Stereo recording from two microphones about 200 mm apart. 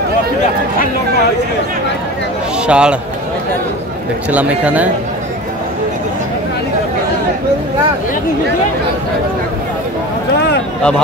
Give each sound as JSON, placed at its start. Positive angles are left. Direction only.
{"t": 2.6, "sound": "a man's voice", "side_deg": -5}
{"t": 4.3, "sound": "a man's voice", "side_deg": -5}
{"t": 10.3, "sound": "a sound", "side_deg": 55}